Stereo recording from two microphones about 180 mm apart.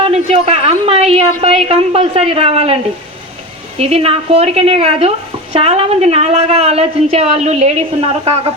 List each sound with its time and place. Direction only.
0.0 s a woman's voice: 35° right (ahead or behind)
3.8 s a woman's voice: 35° right (ahead or behind)